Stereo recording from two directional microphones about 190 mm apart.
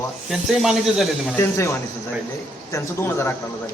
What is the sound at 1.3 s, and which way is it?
Speech, 15° left (ahead or behind).